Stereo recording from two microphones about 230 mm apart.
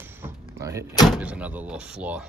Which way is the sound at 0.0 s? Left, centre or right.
Centre.